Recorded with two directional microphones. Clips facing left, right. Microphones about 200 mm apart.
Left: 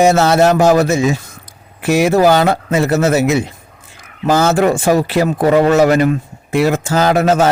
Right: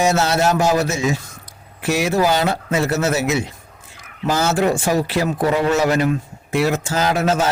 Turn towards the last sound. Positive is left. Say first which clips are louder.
# left 6 dB
turn(degrees=60)  # may be behind; listen again after turning